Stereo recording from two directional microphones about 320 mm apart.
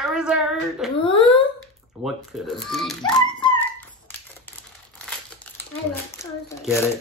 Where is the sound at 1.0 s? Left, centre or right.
Centre.